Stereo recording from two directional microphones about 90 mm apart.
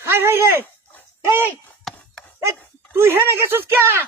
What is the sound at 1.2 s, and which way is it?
Speech, 25° right (ahead or behind).